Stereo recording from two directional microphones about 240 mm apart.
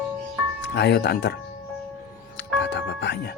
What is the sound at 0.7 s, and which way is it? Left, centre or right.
Speech, left.